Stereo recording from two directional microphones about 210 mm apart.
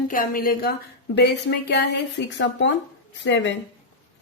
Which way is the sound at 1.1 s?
55° left (ahead or behind).